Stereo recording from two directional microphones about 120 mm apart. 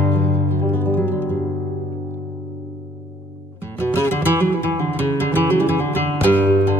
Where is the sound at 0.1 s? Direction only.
15° left (ahead or behind).